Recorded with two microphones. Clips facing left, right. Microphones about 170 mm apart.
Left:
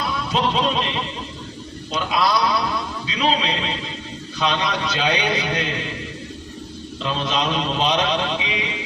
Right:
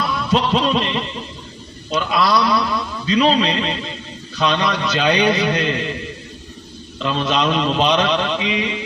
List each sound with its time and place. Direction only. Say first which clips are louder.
0.0 s music: right 3 dB; 50° right (ahead or behind)
1.9 s a man's voice: right 3 dB; 50° right (ahead or behind)
7.2 s a man's voice: right 5 dB; 50° right (ahead or behind)